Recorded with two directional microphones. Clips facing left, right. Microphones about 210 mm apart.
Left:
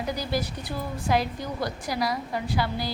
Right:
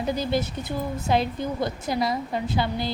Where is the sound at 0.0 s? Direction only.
25° right (ahead or behind).